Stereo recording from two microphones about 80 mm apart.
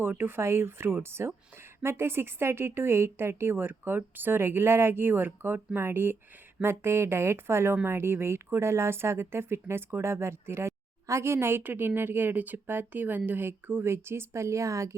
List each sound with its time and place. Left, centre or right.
0.0 s a woman's voice: right